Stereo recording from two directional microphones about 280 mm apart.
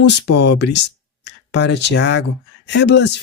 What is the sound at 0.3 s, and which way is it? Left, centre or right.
Speech, left.